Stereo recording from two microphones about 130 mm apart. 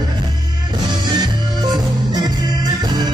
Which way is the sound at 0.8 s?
35° right (ahead or behind).